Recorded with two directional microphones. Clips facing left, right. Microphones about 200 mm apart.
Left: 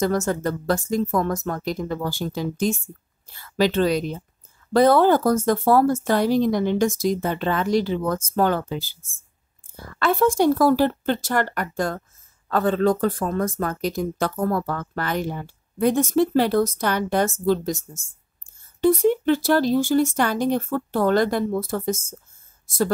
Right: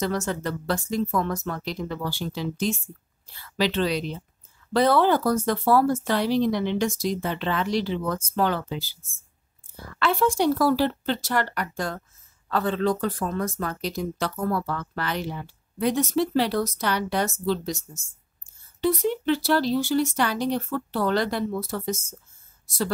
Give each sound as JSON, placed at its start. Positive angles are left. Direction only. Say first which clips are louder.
{"t": 0.0, "sound": "speech", "louder": "left 5 dB", "side_deg": 45}
{"t": 9.9, "sound": "speech", "louder": "left 4 dB", "side_deg": 45}
{"t": 18.8, "sound": "speech", "louder": "left 6 dB", "side_deg": 50}